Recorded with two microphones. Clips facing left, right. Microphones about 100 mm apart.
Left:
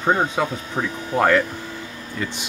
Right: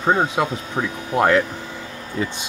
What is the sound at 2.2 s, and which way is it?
Speech, 25° right (ahead or behind).